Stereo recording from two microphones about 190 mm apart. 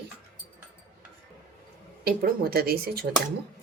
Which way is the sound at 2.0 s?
55° right (ahead or behind).